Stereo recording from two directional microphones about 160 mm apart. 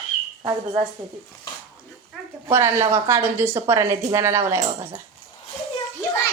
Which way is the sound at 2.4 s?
20° right (ahead or behind).